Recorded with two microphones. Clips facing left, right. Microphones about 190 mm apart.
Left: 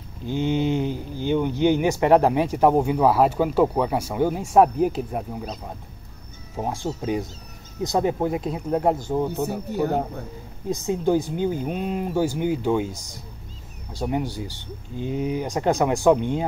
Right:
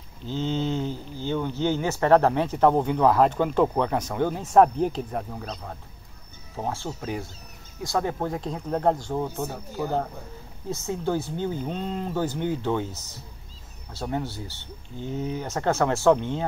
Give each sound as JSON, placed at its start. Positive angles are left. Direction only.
{"t": 0.3, "sound": "speech", "side_deg": 15}
{"t": 9.7, "sound": "speech", "side_deg": 65}
{"t": 10.7, "sound": "speech", "side_deg": 15}